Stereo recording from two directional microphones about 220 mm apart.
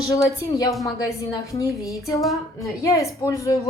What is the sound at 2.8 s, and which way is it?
Speech, 15° left (ahead or behind).